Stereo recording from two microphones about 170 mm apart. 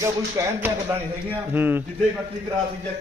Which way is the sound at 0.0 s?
15° right (ahead or behind).